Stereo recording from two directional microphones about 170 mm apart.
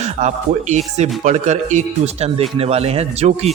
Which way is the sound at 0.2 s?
45° right (ahead or behind).